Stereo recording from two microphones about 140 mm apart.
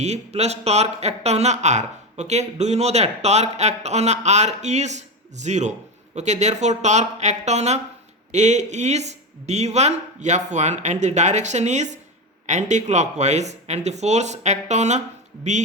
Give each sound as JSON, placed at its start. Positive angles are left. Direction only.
{"t": 0.0, "sound": "speech", "side_deg": -50}